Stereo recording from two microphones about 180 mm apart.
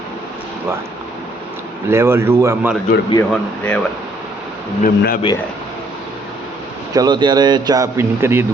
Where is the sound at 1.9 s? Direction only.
15° right (ahead or behind).